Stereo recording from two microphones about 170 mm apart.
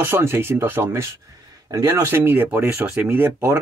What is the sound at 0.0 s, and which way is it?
Speech, 15° right (ahead or behind).